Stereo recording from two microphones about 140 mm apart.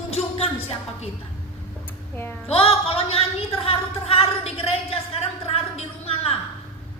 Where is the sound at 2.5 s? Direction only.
45° left (ahead or behind).